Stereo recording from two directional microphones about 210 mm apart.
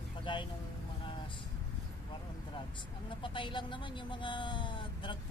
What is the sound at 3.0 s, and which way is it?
Speech, 25° left (ahead or behind).